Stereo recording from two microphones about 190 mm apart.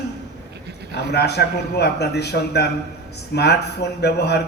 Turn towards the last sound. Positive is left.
turn(degrees=60)  # may be behind; listen again after turning